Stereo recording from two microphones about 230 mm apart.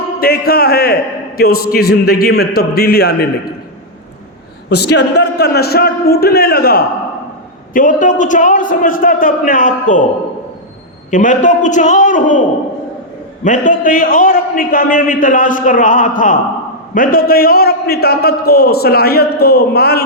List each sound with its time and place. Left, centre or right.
0.2 s a man's voice: left
4.7 s a man's voice: left
11.1 s a man's voice: left
13.4 s a man's voice: left